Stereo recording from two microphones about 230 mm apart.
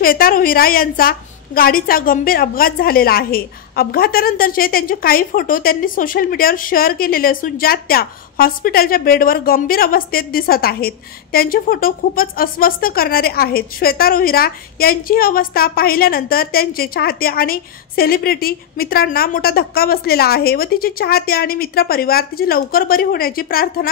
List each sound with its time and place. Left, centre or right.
0.0 s a woman's voice: left